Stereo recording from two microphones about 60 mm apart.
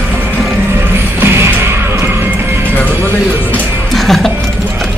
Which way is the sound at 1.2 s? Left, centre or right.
Right.